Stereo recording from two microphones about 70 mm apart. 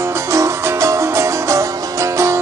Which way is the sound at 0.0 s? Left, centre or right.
Right.